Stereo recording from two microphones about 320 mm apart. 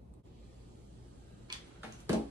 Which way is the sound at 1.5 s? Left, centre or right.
Centre.